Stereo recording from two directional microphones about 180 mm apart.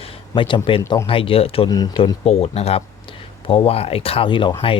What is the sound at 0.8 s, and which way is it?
Speech, 15° left (ahead or behind).